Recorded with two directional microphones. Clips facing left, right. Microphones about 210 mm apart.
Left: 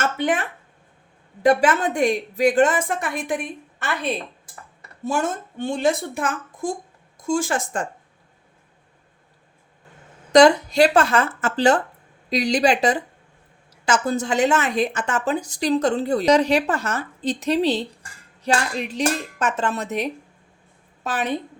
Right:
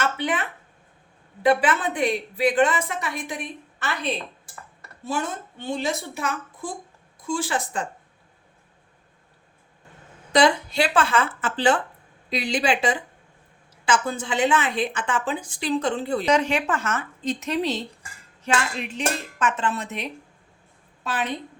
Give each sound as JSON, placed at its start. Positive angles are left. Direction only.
{"t": 0.0, "sound": "a sound", "side_deg": 45}
{"t": 1.4, "sound": "a woman's voice", "side_deg": 45}
{"t": 5.0, "sound": "a woman's voice", "side_deg": 45}
{"t": 10.3, "sound": "a woman's voice", "side_deg": 40}